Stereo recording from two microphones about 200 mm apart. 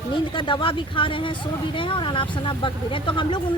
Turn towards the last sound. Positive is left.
turn(degrees=25)  # may be behind; listen again after turning